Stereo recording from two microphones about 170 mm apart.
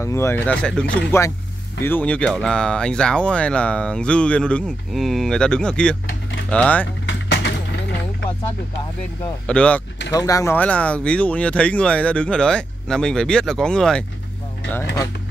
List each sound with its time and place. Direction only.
0.0 s speech: 15° left (ahead or behind)
7.1 s a sound: 90° left
9.5 s speech: 5° left (ahead or behind)
10.1 s speech: 20° left (ahead or behind); by 14.0 s 5° left (ahead or behind)